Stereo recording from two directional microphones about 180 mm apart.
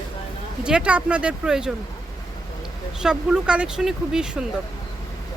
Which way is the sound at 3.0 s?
5° right (ahead or behind).